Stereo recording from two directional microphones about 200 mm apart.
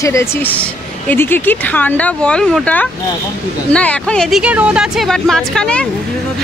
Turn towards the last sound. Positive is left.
turn(degrees=5)  # may be behind; listen again after turning